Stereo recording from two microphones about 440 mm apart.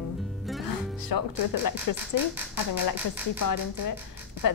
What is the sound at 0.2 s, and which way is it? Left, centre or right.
Music, centre.